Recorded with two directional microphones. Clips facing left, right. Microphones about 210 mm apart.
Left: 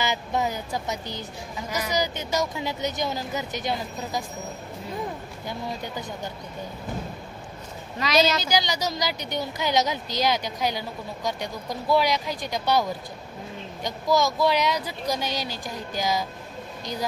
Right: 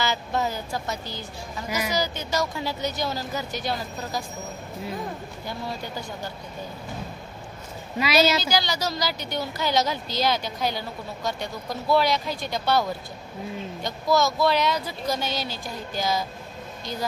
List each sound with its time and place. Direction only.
0.0 s a woman's voice: 15° left (ahead or behind)
5.5 s a woman's voice: 20° left (ahead or behind)
8.0 s a woman's voice: 10° right (ahead or behind)
8.5 s speech: 15° left (ahead or behind)
13.8 s speech: 15° left (ahead or behind)